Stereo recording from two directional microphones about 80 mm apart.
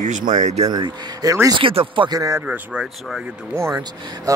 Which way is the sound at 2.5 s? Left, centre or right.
Centre.